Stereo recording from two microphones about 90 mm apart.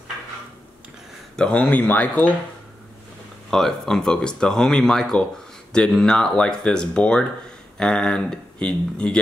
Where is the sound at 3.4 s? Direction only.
5° left (ahead or behind).